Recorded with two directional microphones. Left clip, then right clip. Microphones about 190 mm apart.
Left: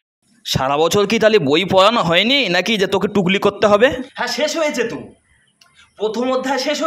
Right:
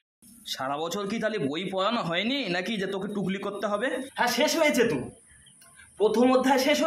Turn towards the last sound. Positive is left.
turn(degrees=5)  # may be behind; listen again after turning